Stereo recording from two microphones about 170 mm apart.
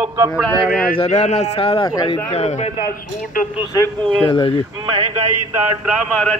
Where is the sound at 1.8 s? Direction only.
20° left (ahead or behind).